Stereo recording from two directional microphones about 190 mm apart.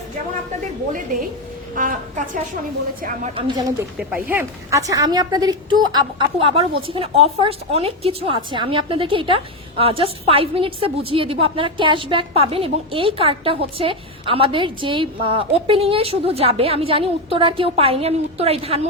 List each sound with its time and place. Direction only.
1.7 s a woman's voice: 45° right (ahead or behind)
3.3 s a woman's voice: 25° right (ahead or behind)
3.9 s a woman's voice: 10° right (ahead or behind); by 18.9 s 30° right (ahead or behind)